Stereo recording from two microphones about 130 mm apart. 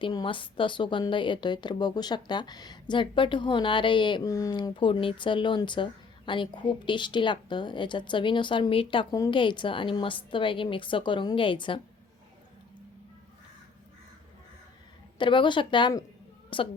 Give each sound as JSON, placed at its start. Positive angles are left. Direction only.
{"t": 0.0, "sound": "speech", "side_deg": 35}
{"t": 4.5, "sound": "speech", "side_deg": 40}
{"t": 15.2, "sound": "a woman's voice", "side_deg": 40}